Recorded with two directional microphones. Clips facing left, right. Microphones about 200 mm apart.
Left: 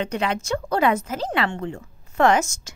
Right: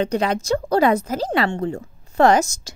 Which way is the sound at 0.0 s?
35° right (ahead or behind).